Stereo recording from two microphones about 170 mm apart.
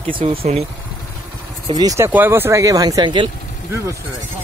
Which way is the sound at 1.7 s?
20° right (ahead or behind).